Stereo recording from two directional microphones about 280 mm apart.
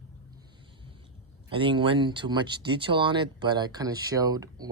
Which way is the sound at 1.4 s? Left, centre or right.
Centre.